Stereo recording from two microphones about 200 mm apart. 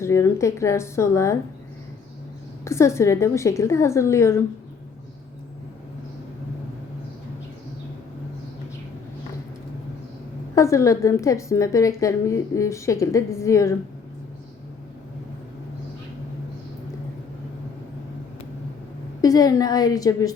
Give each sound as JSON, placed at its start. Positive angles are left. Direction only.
{"t": 0.0, "sound": "a woman's voice", "side_deg": 15}
{"t": 2.6, "sound": "a woman's voice", "side_deg": 15}
{"t": 10.5, "sound": "a woman's voice", "side_deg": 15}
{"t": 19.2, "sound": "a woman's voice", "side_deg": 15}